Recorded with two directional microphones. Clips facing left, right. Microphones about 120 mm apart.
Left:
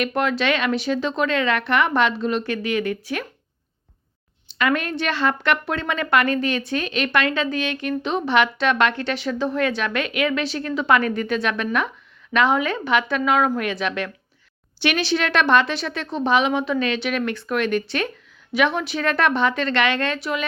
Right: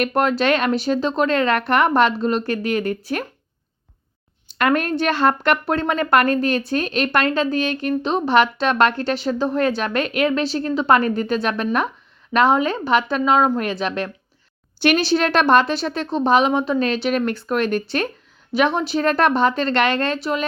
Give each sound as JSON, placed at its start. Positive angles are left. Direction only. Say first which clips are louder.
{"t": 0.0, "sound": "speech", "louder": "right 3 dB", "side_deg": -45}
{"t": 4.5, "sound": "speech", "louder": "right 3 dB", "side_deg": -45}